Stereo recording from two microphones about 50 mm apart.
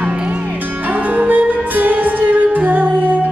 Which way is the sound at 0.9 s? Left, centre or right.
Right.